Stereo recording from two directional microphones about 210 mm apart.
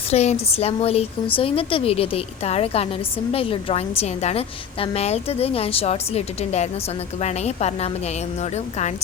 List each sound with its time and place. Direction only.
0.1 s a woman's voice: 30° left (ahead or behind)